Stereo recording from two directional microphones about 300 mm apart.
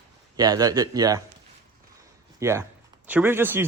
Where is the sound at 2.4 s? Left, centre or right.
Centre.